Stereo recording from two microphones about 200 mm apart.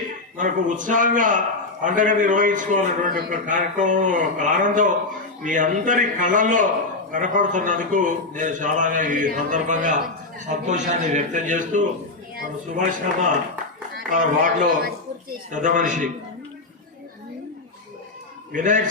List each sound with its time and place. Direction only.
0.3 s a man's voice: 40° right (ahead or behind)
18.5 s a man's voice: 40° right (ahead or behind)